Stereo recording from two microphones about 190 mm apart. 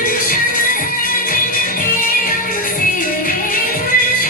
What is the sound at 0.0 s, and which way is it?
Music, 45° left (ahead or behind).